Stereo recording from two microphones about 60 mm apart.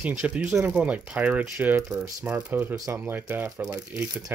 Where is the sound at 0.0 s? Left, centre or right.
Right.